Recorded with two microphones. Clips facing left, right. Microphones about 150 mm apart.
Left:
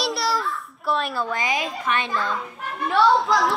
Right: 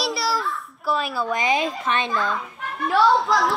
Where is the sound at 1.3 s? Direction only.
25° right (ahead or behind).